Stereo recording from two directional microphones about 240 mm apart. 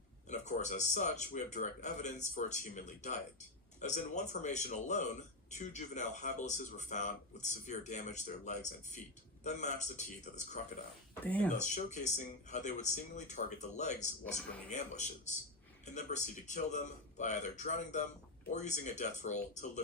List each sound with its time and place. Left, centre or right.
0.3 s speech: left
11.2 s speech: centre
11.5 s speech: left